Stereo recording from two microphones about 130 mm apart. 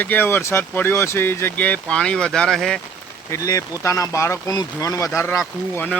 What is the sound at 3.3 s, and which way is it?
Speech, 25° left (ahead or behind).